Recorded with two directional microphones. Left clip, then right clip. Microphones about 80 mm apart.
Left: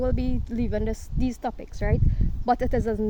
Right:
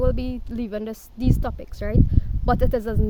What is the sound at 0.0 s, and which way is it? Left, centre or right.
Speech, right.